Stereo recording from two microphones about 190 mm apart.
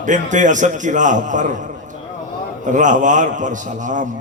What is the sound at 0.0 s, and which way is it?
A man's voice, 40° right (ahead or behind).